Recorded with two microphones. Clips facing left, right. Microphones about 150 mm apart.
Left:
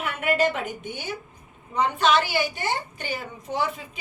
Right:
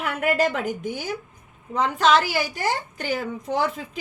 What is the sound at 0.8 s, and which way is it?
A woman's voice, 90° right.